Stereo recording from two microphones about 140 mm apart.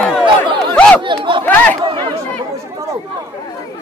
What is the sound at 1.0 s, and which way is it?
Chatter, 35° right (ahead or behind).